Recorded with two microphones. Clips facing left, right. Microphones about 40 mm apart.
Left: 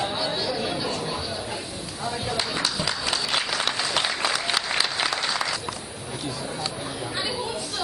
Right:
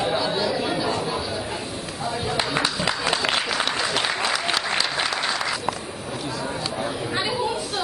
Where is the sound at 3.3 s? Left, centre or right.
Centre.